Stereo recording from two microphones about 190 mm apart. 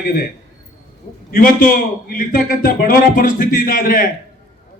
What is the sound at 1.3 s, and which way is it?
Speech, 50° left (ahead or behind).